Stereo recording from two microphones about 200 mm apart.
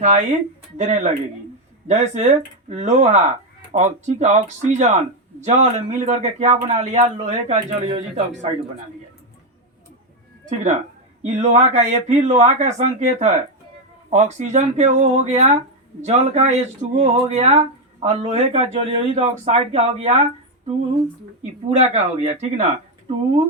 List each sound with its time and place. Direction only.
0.0 s speech: 35° right (ahead or behind)
10.4 s speech: 35° right (ahead or behind)
21.8 s speech: 35° right (ahead or behind)